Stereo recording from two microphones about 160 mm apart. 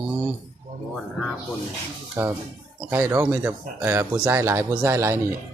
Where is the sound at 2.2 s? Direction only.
15° right (ahead or behind).